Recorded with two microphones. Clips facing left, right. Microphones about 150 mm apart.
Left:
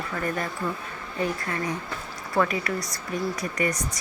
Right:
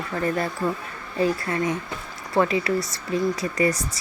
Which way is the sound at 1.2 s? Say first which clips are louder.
Right 5 dB; 30° right (ahead or behind).